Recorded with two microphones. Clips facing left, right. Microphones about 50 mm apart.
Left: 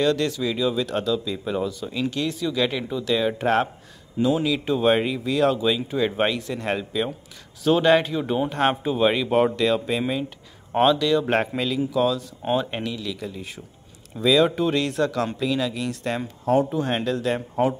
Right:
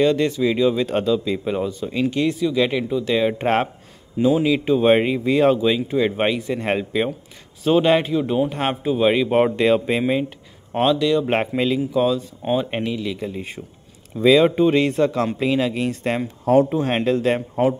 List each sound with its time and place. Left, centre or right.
0.0 s speech: centre
3.3 s speech: right
4.3 s speech: centre
4.9 s speech: right
7.6 s speech: centre
8.1 s speech: centre
9.2 s speech: centre
9.6 s speech: right
10.7 s speech: centre
11.2 s speech: right
14.3 s speech: right